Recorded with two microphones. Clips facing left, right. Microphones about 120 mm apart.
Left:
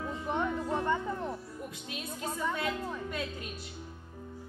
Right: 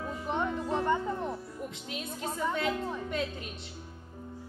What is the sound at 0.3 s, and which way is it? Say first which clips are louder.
Music: right 1 dB; 20° right (ahead or behind).